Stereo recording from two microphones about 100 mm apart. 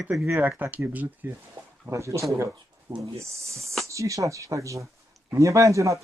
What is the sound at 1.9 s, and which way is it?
Speech, 30° right (ahead or behind).